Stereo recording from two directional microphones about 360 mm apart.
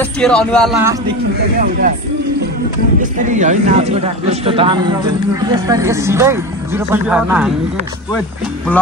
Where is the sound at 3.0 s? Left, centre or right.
Right; by 7.5 s centre.